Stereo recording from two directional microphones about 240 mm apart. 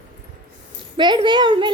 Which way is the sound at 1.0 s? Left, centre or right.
Centre.